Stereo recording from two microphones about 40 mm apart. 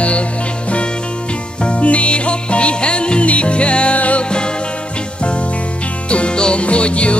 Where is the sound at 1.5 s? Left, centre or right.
Left.